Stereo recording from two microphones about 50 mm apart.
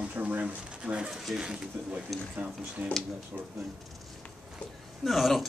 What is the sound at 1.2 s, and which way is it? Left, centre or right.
Speech, centre.